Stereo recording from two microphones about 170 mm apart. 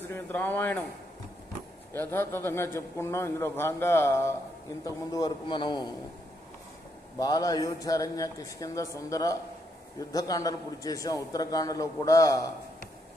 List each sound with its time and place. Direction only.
0.1 s a man's voice: 10° left (ahead or behind)
2.0 s a man's voice: 15° left (ahead or behind)
7.2 s a man's voice: 20° left (ahead or behind)